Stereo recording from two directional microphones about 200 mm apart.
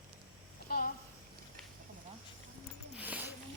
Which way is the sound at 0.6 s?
45° left (ahead or behind).